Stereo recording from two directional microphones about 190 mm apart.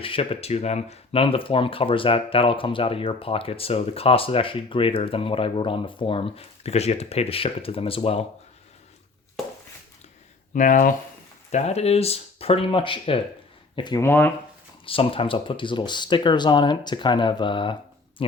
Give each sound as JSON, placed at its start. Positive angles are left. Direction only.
{"t": 0.0, "sound": "speech", "side_deg": 30}
{"t": 10.5, "sound": "speech", "side_deg": 45}
{"t": 14.8, "sound": "speech", "side_deg": 30}